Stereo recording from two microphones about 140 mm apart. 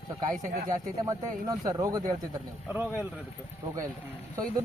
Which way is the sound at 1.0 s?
25° right (ahead or behind).